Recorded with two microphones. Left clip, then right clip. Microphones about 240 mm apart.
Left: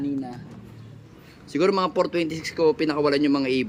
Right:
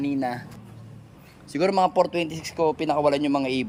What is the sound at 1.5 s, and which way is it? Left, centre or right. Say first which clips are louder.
Speech: right 1 dB; centre.